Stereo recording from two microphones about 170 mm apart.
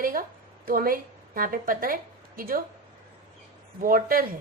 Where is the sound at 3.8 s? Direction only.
55° right (ahead or behind).